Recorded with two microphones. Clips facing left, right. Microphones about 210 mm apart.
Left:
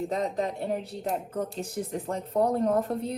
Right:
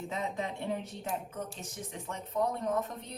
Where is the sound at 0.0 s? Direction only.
40° left (ahead or behind).